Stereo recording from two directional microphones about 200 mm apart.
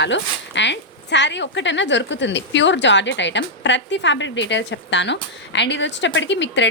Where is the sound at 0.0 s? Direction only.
65° left (ahead or behind).